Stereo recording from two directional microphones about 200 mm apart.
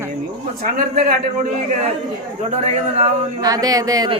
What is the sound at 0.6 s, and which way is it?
Speech, 45° right (ahead or behind).